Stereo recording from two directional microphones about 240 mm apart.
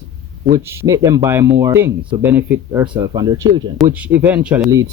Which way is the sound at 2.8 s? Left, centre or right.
Centre.